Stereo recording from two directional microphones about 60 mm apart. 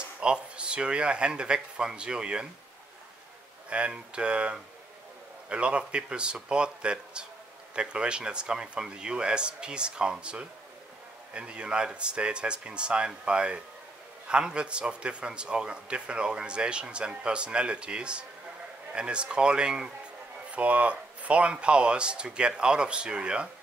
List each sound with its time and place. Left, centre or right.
0.2 s a man's voice: centre
3.7 s a man's voice: centre